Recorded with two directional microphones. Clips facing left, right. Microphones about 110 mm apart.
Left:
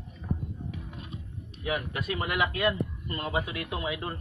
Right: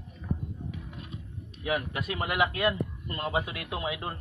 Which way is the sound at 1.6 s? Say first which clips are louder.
Right 1 dB; 20° right (ahead or behind).